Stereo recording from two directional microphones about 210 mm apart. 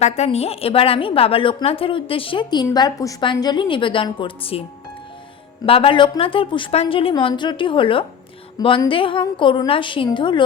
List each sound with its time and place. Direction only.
0.0 s a woman's voice: 30° left (ahead or behind)
5.6 s a woman's voice: 25° left (ahead or behind)